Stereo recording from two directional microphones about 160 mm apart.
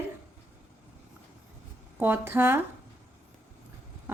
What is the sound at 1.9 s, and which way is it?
Speech, 15° right (ahead or behind).